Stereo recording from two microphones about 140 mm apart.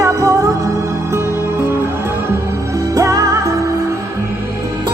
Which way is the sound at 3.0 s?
25° right (ahead or behind).